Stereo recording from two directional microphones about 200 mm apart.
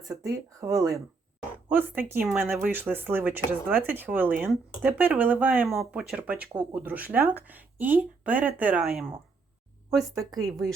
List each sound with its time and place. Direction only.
0.3 s speech: 15° right (ahead or behind); by 10.4 s centre (ahead or behind)